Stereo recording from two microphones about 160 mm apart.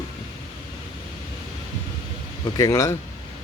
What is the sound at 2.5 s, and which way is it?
Speech, 20° left (ahead or behind).